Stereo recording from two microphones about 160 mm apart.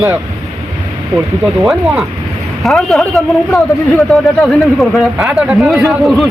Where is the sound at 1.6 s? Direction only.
Centre (ahead or behind).